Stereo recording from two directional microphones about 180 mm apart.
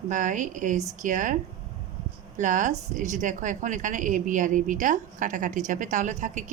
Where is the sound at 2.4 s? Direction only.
45° right (ahead or behind).